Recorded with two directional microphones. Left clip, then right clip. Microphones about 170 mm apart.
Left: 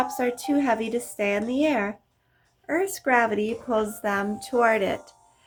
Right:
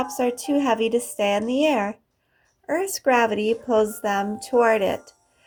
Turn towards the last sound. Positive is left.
turn(degrees=-15)  # may be behind; listen again after turning